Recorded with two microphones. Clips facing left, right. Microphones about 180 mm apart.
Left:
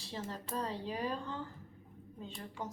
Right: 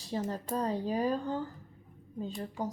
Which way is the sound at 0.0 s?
40° right (ahead or behind).